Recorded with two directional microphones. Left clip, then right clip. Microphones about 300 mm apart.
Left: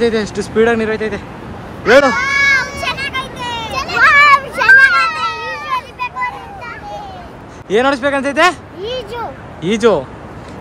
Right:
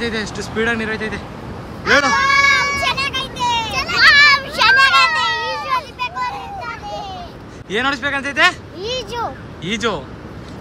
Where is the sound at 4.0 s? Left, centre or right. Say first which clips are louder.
Left 2 dB; centre.